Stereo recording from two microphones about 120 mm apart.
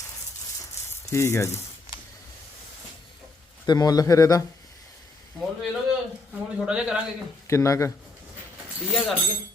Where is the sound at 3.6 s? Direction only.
35° left (ahead or behind).